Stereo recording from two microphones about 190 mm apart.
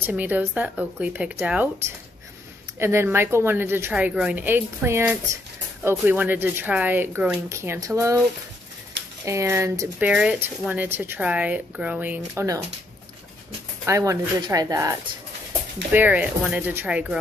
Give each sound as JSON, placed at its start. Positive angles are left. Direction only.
{"t": 0.0, "sound": "a woman's voice", "side_deg": -10}
{"t": 9.2, "sound": "a woman's voice", "side_deg": -15}
{"t": 13.8, "sound": "a woman's voice", "side_deg": -15}